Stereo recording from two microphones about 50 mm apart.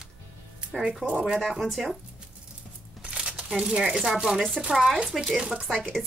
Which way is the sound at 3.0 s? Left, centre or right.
Centre.